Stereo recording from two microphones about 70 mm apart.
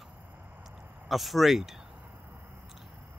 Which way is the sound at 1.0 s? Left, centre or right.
Centre.